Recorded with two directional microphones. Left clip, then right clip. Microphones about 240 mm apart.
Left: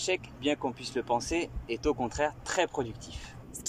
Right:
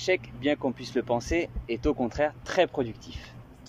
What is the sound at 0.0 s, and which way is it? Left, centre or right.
Speech, centre.